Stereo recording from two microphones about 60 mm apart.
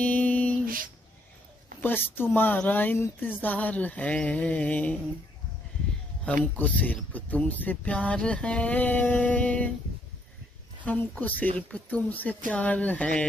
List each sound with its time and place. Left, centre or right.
0.0 s a sound: left
1.8 s speech: left
6.2 s speech: left
10.9 s speech: left